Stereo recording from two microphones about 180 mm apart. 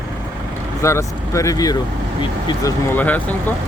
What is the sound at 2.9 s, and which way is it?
Speech, 10° left (ahead or behind).